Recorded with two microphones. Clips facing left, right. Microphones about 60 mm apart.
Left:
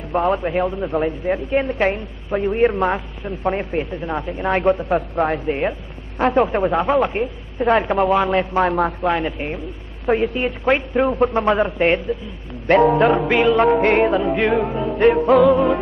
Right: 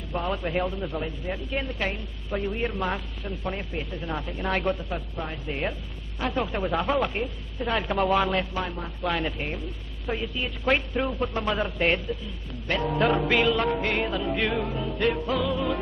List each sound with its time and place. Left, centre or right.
0.1 s a woman's voice: left
4.7 s a woman's voice: left
6.1 s speech: left
8.5 s speech: left
9.0 s speech: left
10.0 s a woman's voice: left
10.6 s speech: left
11.1 s a woman's voice: left
12.6 s a woman's voice: left
13.1 s speech: left
13.6 s a woman's voice: left